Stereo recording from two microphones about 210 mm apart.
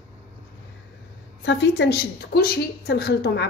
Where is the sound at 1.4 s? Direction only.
55° left (ahead or behind).